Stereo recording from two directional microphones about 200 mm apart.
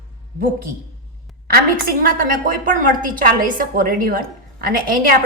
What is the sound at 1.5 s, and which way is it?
A woman's voice, 45° right (ahead or behind).